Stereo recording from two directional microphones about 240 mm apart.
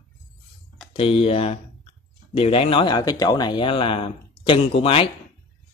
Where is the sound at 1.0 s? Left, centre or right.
Left.